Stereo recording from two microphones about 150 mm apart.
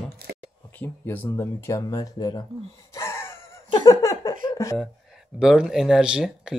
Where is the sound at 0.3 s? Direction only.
90° right.